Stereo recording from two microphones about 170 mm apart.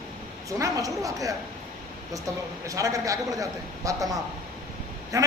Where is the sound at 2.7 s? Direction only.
20° right (ahead or behind).